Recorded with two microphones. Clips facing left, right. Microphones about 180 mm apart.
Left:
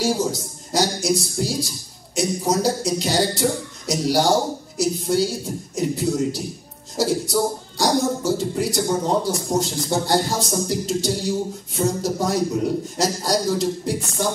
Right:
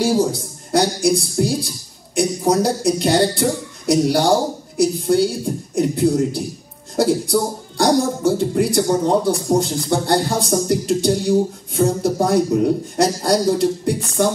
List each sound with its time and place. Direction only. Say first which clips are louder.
0.0 s speech: right 4 dB; 55° right (ahead or behind)